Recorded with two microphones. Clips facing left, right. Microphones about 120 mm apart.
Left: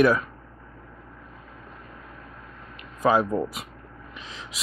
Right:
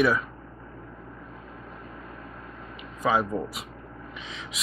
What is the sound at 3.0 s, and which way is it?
Speech, centre (ahead or behind).